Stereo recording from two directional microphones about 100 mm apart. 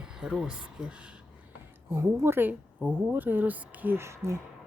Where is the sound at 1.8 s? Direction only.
25° right (ahead or behind).